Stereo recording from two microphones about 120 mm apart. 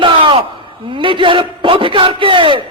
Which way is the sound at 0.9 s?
45° right (ahead or behind).